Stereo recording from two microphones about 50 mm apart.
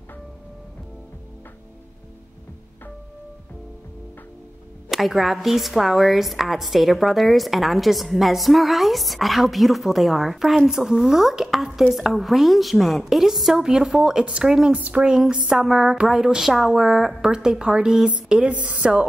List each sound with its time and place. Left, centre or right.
4.9 s a woman's voice: centre
14.7 s speech: right
15.0 s speech: centre
15.5 s a woman's voice: centre
18.5 s speech: right